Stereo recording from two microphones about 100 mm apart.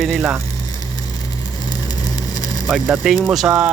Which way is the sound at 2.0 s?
40° left (ahead or behind).